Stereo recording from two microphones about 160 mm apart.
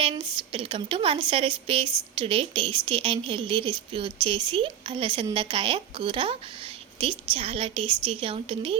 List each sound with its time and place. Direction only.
0.0 s a woman's voice: 35° right (ahead or behind)